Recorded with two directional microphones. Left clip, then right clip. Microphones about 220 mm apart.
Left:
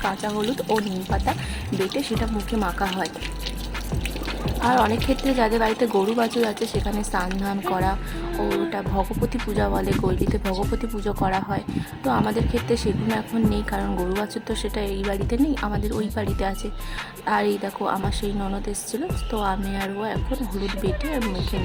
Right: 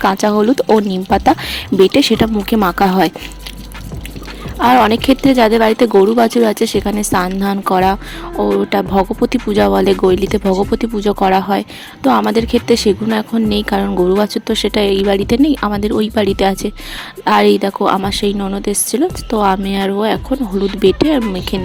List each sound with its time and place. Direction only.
0.0 s speech: 35° right (ahead or behind)
4.6 s speech: 40° right (ahead or behind)